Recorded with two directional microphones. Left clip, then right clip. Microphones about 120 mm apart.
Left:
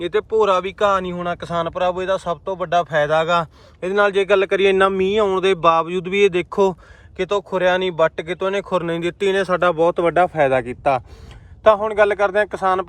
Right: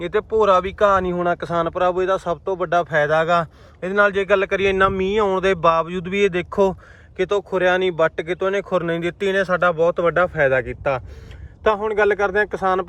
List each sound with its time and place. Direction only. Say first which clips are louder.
0.0 s speech: left 1 dB; 15° left (ahead or behind); by 5.0 s 40° left (ahead or behind)
5.1 s speech: left 1 dB; 20° left (ahead or behind); by 10.4 s 40° left (ahead or behind)
10.5 s speech: left 2 dB; 60° left (ahead or behind)
11.9 s speech: left 2 dB; 15° left (ahead or behind)